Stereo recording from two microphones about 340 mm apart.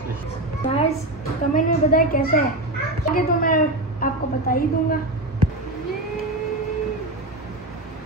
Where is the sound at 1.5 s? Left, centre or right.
Left.